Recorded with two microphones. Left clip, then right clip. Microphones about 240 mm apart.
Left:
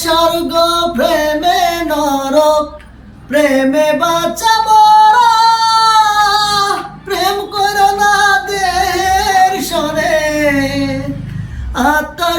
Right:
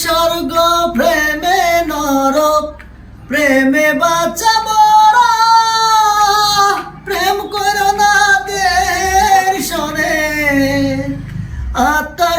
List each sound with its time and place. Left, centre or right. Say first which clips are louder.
0.0 s music: left 2 dB; centre
3.3 s female singing: left 1 dB; centre
7.1 s music: even; centre
11.8 s a sound: even; centre